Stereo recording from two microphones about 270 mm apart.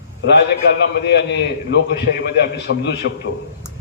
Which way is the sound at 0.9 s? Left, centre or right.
Left.